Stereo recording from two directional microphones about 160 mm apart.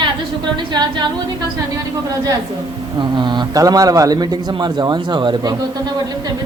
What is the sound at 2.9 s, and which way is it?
Speech, 30° right (ahead or behind).